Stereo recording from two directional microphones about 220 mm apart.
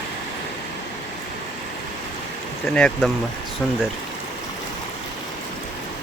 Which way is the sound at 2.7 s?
5° left (ahead or behind).